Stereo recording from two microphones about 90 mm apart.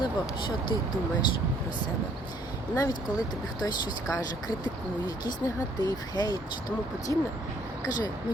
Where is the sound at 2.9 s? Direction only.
45° left (ahead or behind).